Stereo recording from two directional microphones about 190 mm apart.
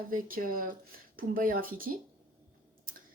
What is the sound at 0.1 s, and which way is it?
Speech, 45° right (ahead or behind).